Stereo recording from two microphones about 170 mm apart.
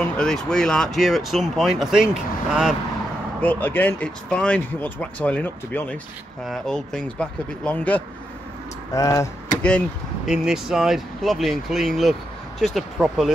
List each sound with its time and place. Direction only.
0.0 s speech: 5° left (ahead or behind)
3.3 s speech: 10° left (ahead or behind)
8.9 s speech: 20° left (ahead or behind)
9.6 s speech: 5° left (ahead or behind)